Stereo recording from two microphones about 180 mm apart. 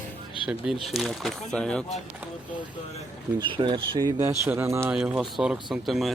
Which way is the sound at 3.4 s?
25° right (ahead or behind).